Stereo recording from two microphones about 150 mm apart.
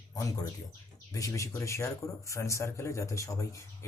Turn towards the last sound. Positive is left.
turn(degrees=20)  # may be behind; listen again after turning